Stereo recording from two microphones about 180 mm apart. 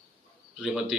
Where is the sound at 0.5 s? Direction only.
5° right (ahead or behind).